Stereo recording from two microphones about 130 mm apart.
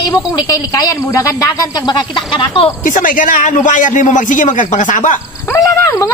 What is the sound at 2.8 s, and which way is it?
A man's voice, 90° left.